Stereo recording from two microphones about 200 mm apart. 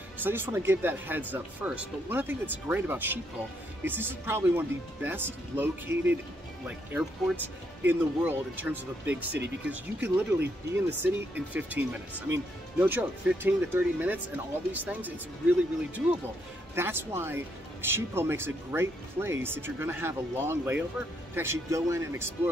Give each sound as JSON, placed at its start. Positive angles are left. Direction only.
{"t": 0.2, "sound": "speech", "side_deg": -10}